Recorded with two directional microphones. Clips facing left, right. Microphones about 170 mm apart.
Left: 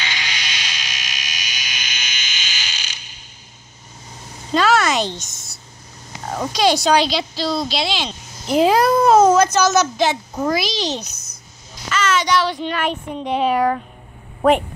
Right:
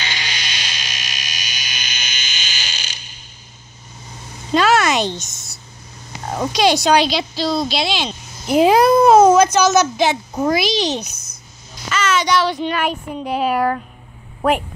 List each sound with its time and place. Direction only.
0.0 s fire alarm: 35° right (ahead or behind)
4.6 s a sound: 20° right (ahead or behind)
6.3 s speech: 20° right (ahead or behind)